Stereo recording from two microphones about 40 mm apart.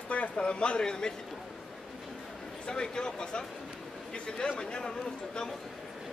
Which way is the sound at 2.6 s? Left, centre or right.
Centre.